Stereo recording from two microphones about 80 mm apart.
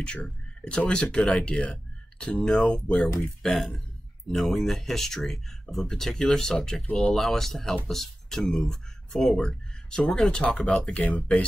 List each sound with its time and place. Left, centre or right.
0.0 s speech: centre